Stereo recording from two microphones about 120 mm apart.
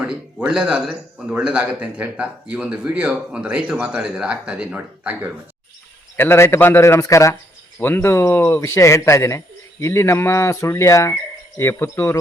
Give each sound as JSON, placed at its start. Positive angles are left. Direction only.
{"t": 0.0, "sound": "a man's voice", "side_deg": -5}
{"t": 6.1, "sound": "a man's voice", "side_deg": 20}